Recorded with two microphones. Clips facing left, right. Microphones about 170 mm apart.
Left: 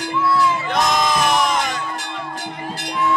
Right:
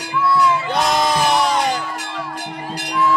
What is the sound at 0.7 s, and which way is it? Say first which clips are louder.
Music: left 1 dB; 30° right (ahead or behind).